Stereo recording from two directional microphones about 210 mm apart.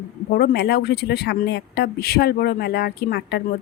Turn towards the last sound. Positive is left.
turn(degrees=50)  # may be behind; listen again after turning